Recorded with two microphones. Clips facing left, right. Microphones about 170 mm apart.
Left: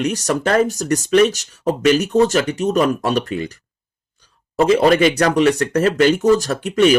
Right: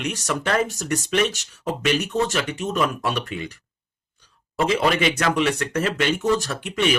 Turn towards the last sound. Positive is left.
turn(degrees=40)  # may be behind; listen again after turning